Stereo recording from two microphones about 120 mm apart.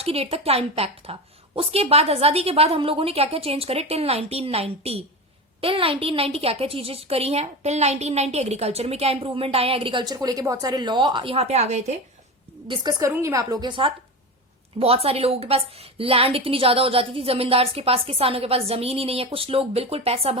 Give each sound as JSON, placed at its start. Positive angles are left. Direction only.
{"t": 0.0, "sound": "a woman's voice", "side_deg": -55}
{"t": 12.6, "sound": "a woman's voice", "side_deg": -40}
{"t": 13.0, "sound": "a woman's voice", "side_deg": -25}
{"t": 13.7, "sound": "a woman's voice", "side_deg": -45}
{"t": 14.8, "sound": "a woman's voice", "side_deg": -55}